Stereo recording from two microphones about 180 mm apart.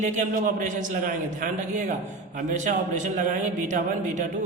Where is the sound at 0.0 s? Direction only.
45° right (ahead or behind).